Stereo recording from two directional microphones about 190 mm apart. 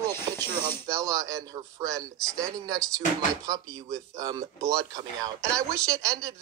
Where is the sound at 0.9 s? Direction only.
15° right (ahead or behind).